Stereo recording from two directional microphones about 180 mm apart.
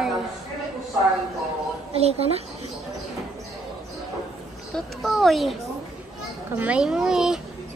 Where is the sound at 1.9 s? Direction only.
35° right (ahead or behind).